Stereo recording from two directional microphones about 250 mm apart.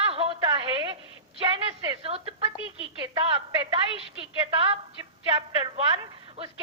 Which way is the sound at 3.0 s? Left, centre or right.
Right.